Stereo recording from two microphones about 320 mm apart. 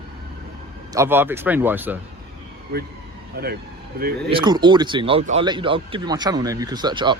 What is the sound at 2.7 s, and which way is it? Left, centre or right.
Speech, right.